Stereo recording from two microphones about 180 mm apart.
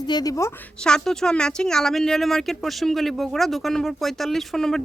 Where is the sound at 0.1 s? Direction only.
20° left (ahead or behind).